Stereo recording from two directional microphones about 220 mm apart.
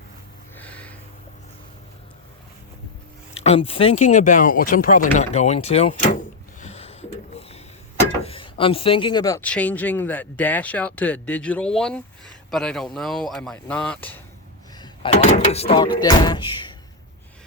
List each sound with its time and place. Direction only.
0.5 s a sound: 5° left (ahead or behind)
3.4 s speech: 25° left (ahead or behind); by 14.2 s 5° left (ahead or behind)
15.1 s speech: 35° left (ahead or behind)